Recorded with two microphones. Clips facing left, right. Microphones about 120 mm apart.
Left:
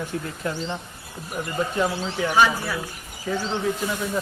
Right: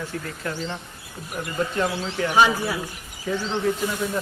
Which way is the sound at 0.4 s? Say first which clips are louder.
Left 2 dB; 20° left (ahead or behind).